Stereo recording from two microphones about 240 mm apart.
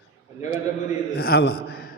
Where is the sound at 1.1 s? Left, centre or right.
Left.